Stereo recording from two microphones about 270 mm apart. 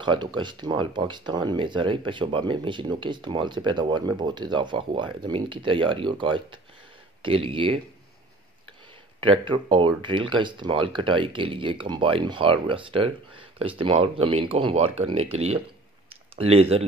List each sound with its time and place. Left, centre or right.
0.0 s speech: centre
9.2 s speech: centre